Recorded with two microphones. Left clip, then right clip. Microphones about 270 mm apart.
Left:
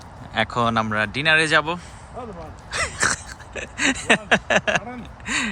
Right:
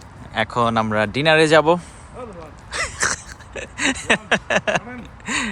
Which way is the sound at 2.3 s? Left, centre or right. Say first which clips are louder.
Even; centre.